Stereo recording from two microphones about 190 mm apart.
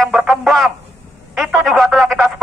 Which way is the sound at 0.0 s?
Centre (ahead or behind).